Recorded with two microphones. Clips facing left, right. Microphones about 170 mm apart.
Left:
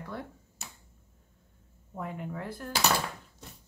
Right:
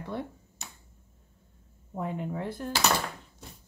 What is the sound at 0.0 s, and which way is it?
Speech, 25° right (ahead or behind).